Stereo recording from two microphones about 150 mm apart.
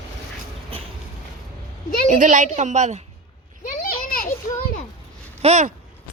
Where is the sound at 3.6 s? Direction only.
75° left (ahead or behind).